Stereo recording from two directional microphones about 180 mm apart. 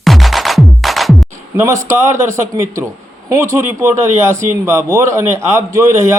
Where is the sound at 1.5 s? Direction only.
15° right (ahead or behind).